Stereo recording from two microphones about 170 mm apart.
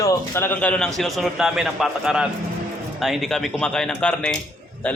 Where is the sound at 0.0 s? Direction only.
15° left (ahead or behind).